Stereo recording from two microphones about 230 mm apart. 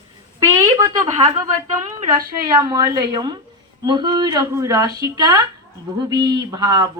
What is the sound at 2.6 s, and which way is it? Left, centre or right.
Speech, centre.